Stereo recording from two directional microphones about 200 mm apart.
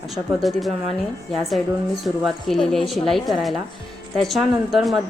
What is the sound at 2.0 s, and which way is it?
Speech, centre (ahead or behind).